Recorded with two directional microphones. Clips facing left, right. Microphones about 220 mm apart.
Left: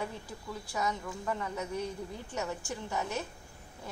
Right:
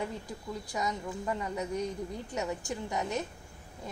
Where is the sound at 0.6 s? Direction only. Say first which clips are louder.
Left 1 dB; 15° right (ahead or behind).